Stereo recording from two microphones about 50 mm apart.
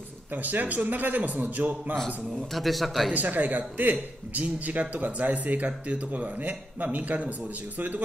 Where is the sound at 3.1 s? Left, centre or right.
Right.